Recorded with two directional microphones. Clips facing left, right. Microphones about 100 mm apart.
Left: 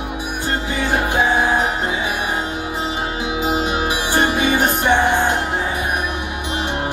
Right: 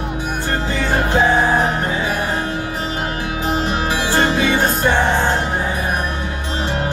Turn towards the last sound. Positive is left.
turn(degrees=15)  # may be behind; listen again after turning